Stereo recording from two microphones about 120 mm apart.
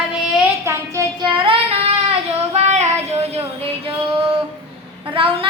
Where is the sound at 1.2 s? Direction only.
45° right (ahead or behind).